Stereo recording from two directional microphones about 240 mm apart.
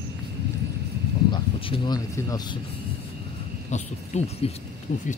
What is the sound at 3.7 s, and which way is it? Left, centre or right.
Hoot, left.